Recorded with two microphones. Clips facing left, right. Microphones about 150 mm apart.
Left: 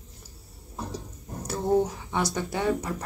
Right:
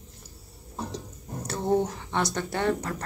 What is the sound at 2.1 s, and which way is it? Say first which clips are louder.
Speech: even; 10° left (ahead or behind).